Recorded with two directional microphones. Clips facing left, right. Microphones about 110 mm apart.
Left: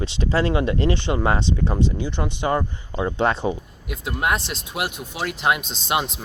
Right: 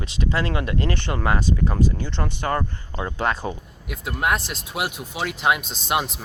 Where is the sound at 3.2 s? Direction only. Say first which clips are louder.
Left 3 dB; 25° left (ahead or behind).